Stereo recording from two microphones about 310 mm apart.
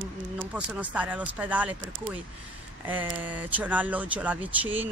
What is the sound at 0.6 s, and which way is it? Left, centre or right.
Speech, centre.